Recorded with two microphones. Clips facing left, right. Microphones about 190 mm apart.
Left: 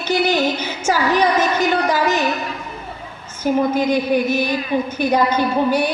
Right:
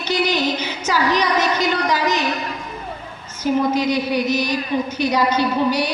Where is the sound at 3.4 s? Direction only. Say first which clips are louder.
Left 1 dB; 55° left (ahead or behind).